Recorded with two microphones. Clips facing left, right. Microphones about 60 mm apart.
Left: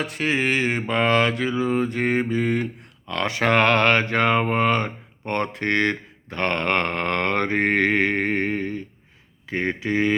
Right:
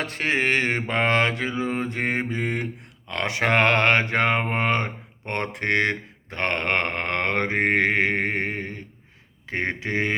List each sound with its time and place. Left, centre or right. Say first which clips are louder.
0.0 s mantra: left 1 dB; right
3.1 s speech: left 2 dB; right
9.5 s mantra: left 2 dB; right